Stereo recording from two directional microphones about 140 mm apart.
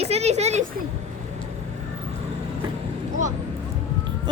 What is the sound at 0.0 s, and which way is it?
Speech, 50° right (ahead or behind).